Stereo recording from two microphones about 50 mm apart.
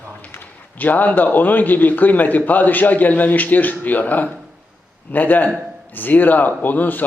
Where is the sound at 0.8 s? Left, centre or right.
Left.